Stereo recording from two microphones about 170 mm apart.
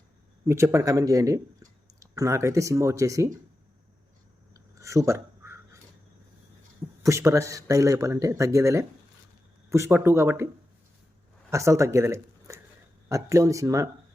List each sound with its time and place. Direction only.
0.4 s speech: 15° right (ahead or behind)
4.5 s a sound: 20° right (ahead or behind)
7.0 s speech: 15° right (ahead or behind)
11.5 s speech: 15° right (ahead or behind)